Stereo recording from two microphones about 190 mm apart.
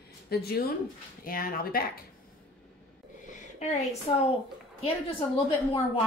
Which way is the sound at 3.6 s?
35° left (ahead or behind).